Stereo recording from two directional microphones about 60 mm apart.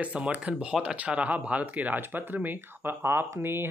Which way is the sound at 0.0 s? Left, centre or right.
Right.